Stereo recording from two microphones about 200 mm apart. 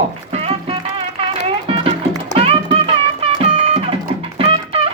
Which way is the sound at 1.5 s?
30° right (ahead or behind).